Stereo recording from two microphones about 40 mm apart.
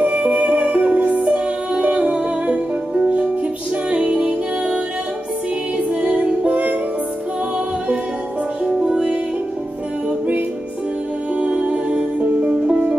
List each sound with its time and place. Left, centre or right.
0.2 s music: right
5.9 s music: right
8.6 s music: centre
11.3 s music: right